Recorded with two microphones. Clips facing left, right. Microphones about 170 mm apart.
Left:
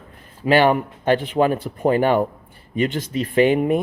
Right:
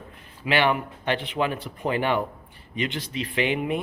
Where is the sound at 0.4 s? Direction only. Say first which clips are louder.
Left 7 dB; 40° left (ahead or behind).